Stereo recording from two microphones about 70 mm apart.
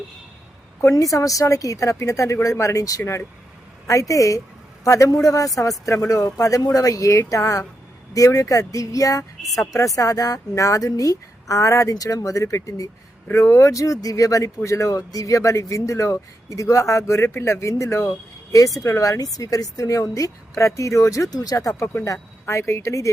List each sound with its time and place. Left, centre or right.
0.8 s speech: left
13.3 s speech: left